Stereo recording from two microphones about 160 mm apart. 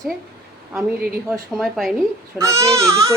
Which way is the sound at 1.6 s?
Centre (ahead or behind).